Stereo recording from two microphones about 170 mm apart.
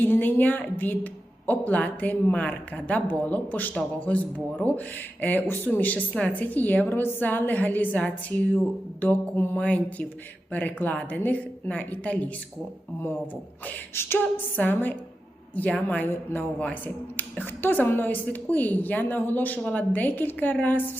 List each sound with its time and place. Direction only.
0.0 s a woman's voice: 10° left (ahead or behind)
13.7 s a woman's voice: 15° left (ahead or behind)